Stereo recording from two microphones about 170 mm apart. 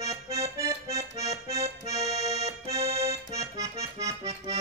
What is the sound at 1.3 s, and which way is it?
Accordion, 35° right (ahead or behind).